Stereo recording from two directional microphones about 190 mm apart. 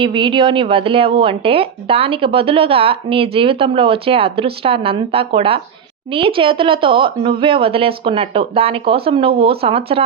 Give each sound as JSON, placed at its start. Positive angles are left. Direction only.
{"t": 0.0, "sound": "speech", "side_deg": -25}